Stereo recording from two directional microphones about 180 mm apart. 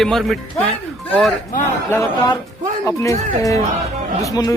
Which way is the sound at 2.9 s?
20° left (ahead or behind).